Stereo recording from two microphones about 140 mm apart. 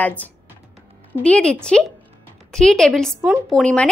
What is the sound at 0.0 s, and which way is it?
A woman's voice, 10° left (ahead or behind).